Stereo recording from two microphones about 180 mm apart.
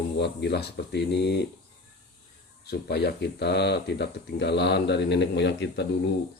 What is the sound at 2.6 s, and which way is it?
Speech, 65° left (ahead or behind).